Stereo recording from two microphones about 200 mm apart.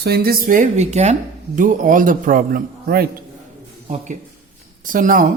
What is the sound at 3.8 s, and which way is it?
Speech, 30° right (ahead or behind).